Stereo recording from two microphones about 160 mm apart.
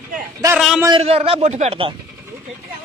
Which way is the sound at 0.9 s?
35° right (ahead or behind).